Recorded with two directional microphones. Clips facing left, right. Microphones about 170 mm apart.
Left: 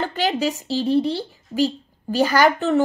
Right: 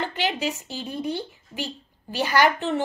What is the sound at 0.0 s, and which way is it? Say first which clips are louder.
Speech: left 5 dB; 40° left (ahead or behind).